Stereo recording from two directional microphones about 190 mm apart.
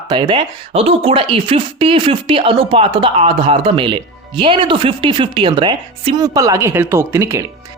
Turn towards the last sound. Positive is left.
turn(degrees=-15)  # may be behind; listen again after turning